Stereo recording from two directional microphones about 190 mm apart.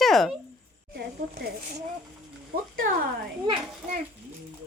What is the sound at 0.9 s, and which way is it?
Speech, 55° right (ahead or behind).